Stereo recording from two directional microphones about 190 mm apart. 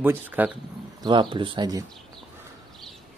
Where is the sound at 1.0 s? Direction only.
25° right (ahead or behind).